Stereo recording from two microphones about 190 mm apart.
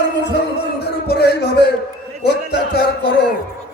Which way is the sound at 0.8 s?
60° left (ahead or behind).